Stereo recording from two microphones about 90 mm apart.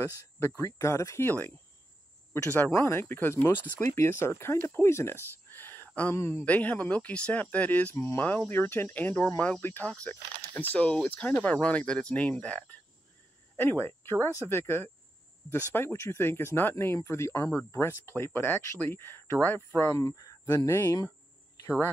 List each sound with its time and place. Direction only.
0.6 s speech: 35° left (ahead or behind)
1.2 s speech: 20° left (ahead or behind)
6.4 s speech: 15° left (ahead or behind)
7.9 s speech: 30° left (ahead or behind)
8.2 s speech: 20° left (ahead or behind)
13.6 s speech: 25° left (ahead or behind)